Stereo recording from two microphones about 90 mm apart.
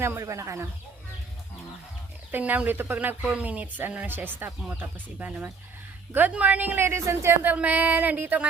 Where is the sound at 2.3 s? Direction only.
20° right (ahead or behind).